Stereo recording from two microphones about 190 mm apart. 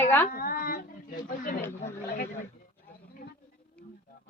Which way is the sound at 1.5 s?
45° left (ahead or behind).